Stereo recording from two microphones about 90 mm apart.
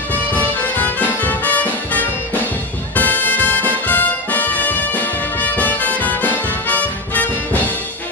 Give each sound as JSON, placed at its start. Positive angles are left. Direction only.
{"t": 0.1, "sound": "music", "side_deg": 20}